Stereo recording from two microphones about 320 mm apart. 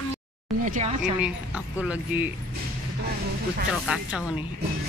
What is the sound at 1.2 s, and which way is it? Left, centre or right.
Speech, centre.